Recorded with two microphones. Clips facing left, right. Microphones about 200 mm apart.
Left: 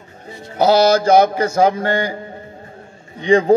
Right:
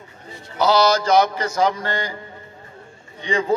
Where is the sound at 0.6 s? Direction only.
50° left (ahead or behind).